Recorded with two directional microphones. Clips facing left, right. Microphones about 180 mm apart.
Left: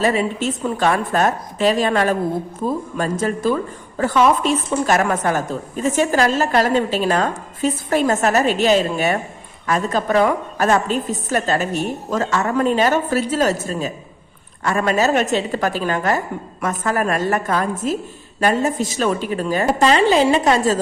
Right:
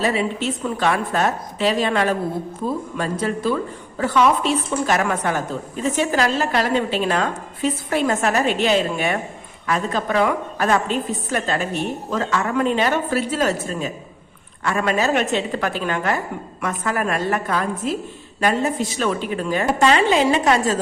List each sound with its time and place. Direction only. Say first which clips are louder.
0.0 s a woman's voice: left 2 dB; 45° left (ahead or behind)